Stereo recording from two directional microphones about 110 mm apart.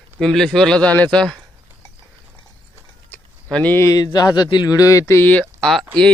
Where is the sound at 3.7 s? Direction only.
30° left (ahead or behind).